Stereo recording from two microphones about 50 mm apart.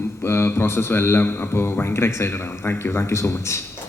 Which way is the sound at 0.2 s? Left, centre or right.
Left.